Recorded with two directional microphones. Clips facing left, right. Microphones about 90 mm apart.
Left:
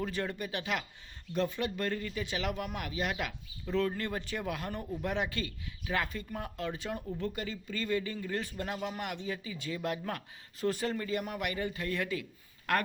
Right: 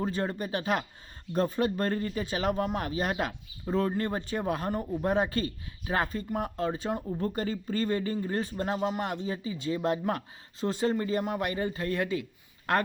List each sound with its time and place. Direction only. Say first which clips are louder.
0.0 s speech: right 4 dB; 35° right (ahead or behind)